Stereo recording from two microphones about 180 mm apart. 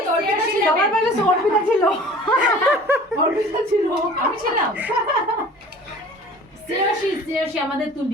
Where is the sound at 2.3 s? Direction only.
5° right (ahead or behind).